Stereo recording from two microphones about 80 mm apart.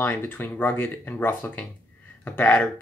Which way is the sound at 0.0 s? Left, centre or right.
Left.